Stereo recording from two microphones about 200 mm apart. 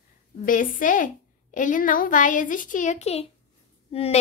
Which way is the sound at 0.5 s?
40° left (ahead or behind).